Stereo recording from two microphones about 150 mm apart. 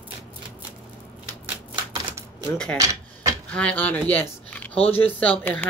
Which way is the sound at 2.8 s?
20° right (ahead or behind).